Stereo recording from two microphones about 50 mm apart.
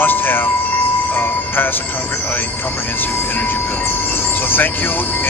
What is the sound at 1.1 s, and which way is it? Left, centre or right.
Music, left.